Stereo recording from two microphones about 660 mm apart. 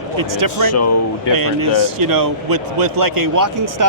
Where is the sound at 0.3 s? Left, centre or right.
Right.